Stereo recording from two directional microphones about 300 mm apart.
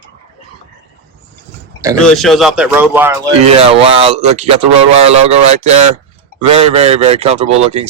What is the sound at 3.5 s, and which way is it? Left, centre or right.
A man's voice, centre.